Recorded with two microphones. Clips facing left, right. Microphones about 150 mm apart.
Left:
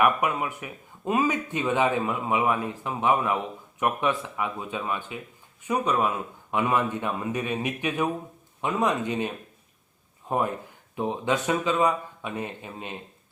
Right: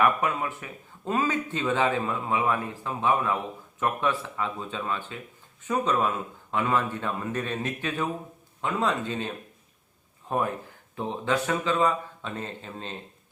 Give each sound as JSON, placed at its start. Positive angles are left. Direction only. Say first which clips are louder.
{"t": 0.0, "sound": "speech", "louder": "left 1 dB", "side_deg": 15}